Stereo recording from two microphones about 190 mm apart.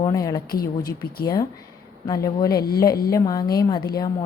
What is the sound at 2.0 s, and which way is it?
A woman's voice, 20° left (ahead or behind).